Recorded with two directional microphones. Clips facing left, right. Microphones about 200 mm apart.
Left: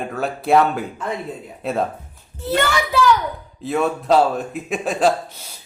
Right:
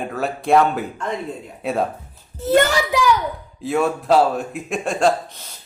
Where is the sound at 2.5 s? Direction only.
45° right (ahead or behind).